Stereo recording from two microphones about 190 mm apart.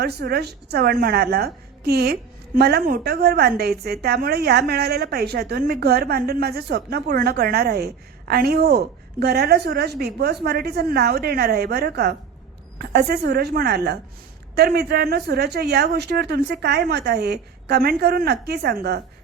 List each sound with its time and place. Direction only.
0.0 s a woman's voice: 55° right (ahead or behind)